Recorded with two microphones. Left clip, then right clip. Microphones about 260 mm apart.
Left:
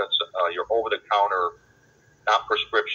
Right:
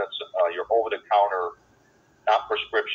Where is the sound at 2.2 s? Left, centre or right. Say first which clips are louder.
Left 1 dB; centre.